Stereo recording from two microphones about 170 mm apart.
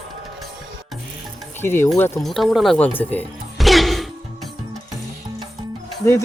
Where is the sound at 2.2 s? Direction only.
Centre (ahead or behind).